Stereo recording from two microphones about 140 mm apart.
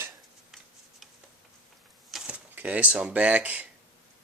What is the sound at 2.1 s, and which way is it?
Speech, 5° right (ahead or behind).